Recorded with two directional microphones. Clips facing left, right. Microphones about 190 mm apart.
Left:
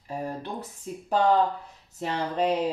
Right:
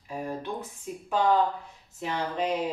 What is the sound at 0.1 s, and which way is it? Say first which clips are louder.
Speech: even; 35° left (ahead or behind).